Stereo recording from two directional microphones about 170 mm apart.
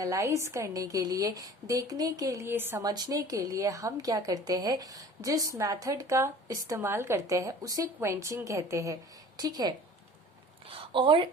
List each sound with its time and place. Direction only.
0.0 s a woman's voice: 20° right (ahead or behind)